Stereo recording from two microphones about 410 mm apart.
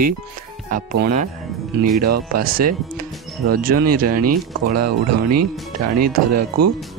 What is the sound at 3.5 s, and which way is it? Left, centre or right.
Speech, right.